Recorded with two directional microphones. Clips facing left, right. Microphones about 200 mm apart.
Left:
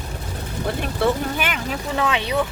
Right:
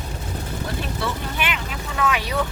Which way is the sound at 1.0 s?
45° left (ahead or behind).